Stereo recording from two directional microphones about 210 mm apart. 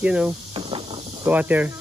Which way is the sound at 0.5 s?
25° right (ahead or behind).